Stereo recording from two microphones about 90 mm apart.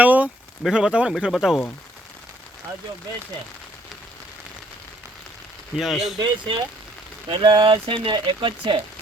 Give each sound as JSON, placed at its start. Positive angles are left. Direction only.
{"t": 0.0, "sound": "a sound", "side_deg": -20}
{"t": 0.7, "sound": "speech", "side_deg": -10}
{"t": 5.7, "sound": "speech", "side_deg": 0}
{"t": 6.1, "sound": "speech", "side_deg": -60}
{"t": 8.1, "sound": "speech", "side_deg": -65}